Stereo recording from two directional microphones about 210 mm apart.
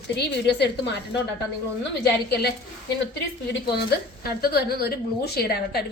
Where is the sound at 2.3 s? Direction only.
50° left (ahead or behind).